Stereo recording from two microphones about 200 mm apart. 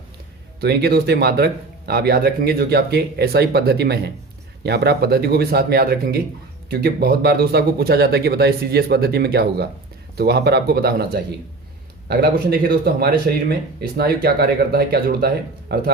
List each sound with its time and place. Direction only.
0.6 s speech: 55° right (ahead or behind)